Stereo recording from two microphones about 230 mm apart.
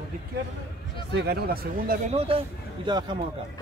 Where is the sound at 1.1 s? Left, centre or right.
Right.